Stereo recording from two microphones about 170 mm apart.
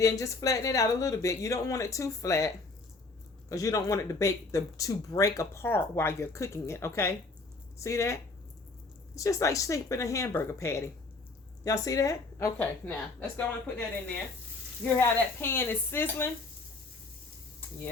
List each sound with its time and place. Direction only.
0.0 s speech: 20° left (ahead or behind)
3.5 s speech: 20° left (ahead or behind)